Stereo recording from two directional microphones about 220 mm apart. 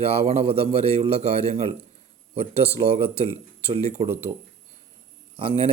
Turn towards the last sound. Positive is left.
turn(degrees=-25)  # may be behind; listen again after turning